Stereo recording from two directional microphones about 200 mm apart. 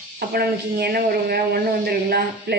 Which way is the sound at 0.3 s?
50° right (ahead or behind).